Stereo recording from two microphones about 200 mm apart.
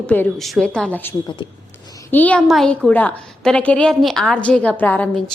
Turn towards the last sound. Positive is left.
turn(degrees=10)  # may be behind; listen again after turning